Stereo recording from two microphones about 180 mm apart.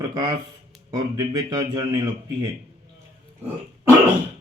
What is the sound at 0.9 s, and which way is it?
Speech, 20° right (ahead or behind).